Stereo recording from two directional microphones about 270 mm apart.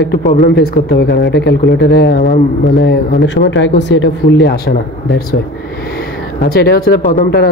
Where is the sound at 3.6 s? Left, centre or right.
Left.